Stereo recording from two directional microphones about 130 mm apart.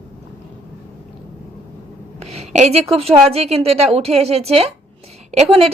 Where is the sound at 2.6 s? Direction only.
55° right (ahead or behind).